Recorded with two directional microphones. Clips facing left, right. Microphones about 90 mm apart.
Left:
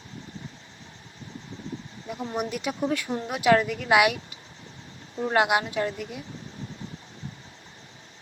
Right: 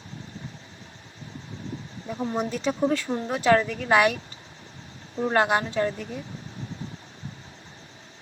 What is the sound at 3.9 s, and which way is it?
Speech, 10° left (ahead or behind).